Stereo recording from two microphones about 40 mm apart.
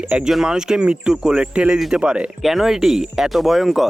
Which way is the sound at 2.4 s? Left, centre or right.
Centre.